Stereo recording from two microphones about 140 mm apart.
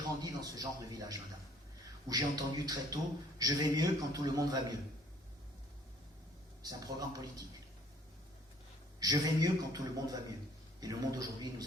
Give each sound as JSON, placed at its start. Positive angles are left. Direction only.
{"t": 0.2, "sound": "speech", "side_deg": -25}
{"t": 6.6, "sound": "speech", "side_deg": -25}
{"t": 9.0, "sound": "speech", "side_deg": -25}